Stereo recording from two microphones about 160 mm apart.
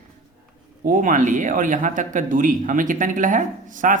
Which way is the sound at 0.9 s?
55° right (ahead or behind).